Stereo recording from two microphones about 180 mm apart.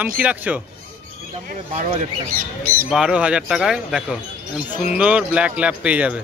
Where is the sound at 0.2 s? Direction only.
10° right (ahead or behind).